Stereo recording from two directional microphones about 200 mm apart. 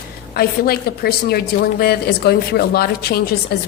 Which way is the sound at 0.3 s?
50° left (ahead or behind).